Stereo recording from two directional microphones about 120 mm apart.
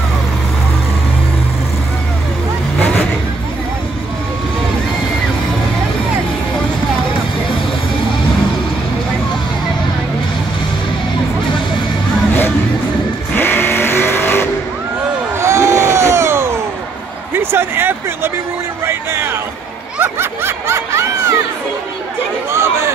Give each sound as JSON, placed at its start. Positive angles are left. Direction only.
{"t": 13.3, "sound": "vehicle", "side_deg": 15}
{"t": 15.3, "sound": "a sound", "side_deg": -25}
{"t": 18.9, "sound": "music", "side_deg": -20}
{"t": 20.0, "sound": "snicker", "side_deg": -20}
{"t": 22.5, "sound": "chatter", "side_deg": -20}